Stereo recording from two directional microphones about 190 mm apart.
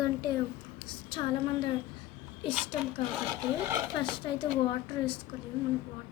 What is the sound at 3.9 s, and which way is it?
Speech, 25° left (ahead or behind).